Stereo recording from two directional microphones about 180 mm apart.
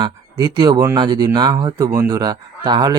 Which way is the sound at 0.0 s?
20° right (ahead or behind).